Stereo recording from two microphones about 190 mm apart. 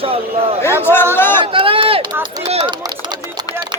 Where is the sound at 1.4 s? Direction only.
30° right (ahead or behind).